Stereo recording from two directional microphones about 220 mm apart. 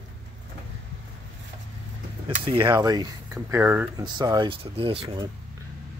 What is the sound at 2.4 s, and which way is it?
Speech, 20° right (ahead or behind).